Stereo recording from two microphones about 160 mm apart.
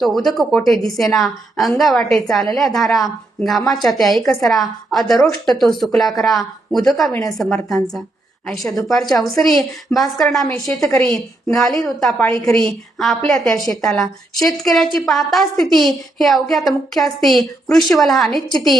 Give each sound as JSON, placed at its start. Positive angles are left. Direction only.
{"t": 0.0, "sound": "a woman's voice", "side_deg": 0}
{"t": 7.1, "sound": "a woman's voice", "side_deg": 20}
{"t": 7.3, "sound": "a woman's voice", "side_deg": 0}